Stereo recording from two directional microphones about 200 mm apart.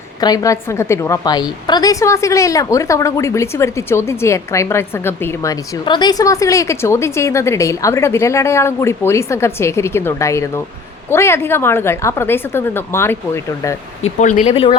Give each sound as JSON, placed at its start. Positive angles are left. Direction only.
{"t": 0.2, "sound": "a woman's voice", "side_deg": 20}
{"t": 14.2, "sound": "speech", "side_deg": 40}